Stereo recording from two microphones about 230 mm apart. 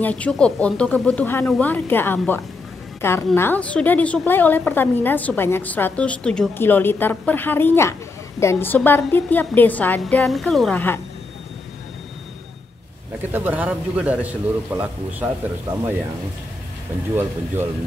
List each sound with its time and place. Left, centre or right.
0.0 s a woman's voice: centre
13.2 s a man's voice: centre